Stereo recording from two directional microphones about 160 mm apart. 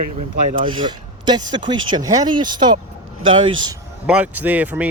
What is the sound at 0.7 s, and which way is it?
A man's voice, 30° right (ahead or behind).